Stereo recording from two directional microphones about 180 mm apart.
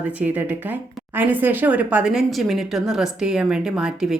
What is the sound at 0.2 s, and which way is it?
A woman's voice, 10° right (ahead or behind).